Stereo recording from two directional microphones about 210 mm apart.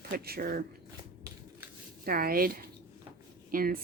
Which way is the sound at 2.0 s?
45° right (ahead or behind).